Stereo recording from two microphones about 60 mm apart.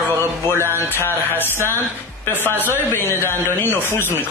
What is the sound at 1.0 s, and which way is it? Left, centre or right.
Speech, left.